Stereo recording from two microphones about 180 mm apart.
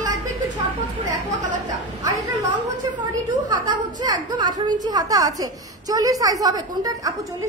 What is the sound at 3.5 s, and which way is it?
A woman's voice, 25° right (ahead or behind).